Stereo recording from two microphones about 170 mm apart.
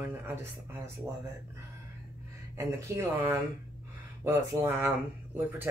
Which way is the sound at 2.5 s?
15° right (ahead or behind).